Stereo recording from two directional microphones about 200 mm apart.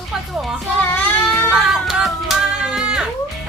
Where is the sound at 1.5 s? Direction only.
5° right (ahead or behind).